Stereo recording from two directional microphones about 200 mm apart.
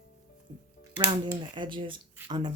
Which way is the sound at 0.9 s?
25° right (ahead or behind).